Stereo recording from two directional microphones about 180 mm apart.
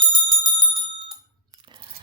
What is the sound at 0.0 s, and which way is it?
Bell, 25° right (ahead or behind).